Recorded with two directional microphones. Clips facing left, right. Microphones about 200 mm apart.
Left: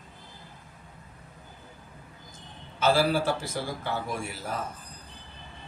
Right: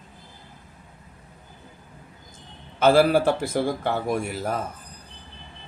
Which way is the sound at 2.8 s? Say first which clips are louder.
Right 7 dB; 55° right (ahead or behind).